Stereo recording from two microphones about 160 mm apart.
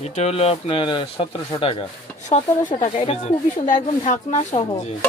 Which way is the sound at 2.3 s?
40° left (ahead or behind).